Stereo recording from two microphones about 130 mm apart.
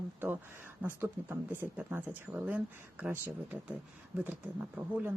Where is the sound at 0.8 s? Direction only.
15° right (ahead or behind).